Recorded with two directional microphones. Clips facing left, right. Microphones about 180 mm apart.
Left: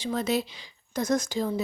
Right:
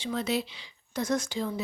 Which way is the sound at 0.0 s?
45° left (ahead or behind).